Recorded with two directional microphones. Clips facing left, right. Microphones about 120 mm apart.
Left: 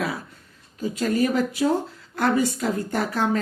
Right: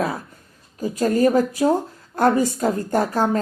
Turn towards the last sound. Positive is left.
turn(degrees=-45)  # may be behind; listen again after turning